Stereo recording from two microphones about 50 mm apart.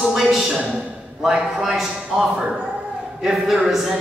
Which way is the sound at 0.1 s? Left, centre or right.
Centre.